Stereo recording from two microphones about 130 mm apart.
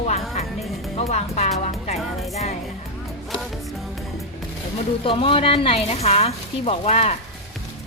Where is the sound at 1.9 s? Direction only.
Centre (ahead or behind).